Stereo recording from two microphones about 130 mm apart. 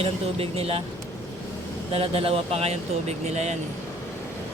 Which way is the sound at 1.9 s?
45° right (ahead or behind).